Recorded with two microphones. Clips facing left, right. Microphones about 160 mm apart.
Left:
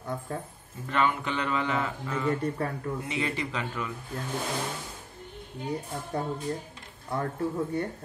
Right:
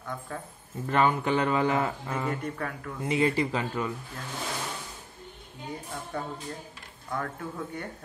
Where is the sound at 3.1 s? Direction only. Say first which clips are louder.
Right 10 dB; 35° right (ahead or behind).